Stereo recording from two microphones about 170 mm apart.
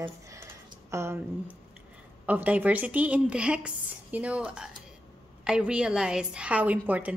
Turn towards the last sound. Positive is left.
turn(degrees=-10)  # may be behind; listen again after turning